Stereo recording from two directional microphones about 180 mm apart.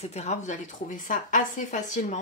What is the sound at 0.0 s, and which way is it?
A woman's voice, 35° left (ahead or behind).